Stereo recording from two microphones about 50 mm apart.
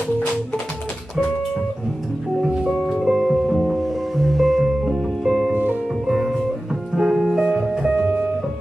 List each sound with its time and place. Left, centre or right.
2.8 s music: centre
5.5 s music: right
6.0 s music: centre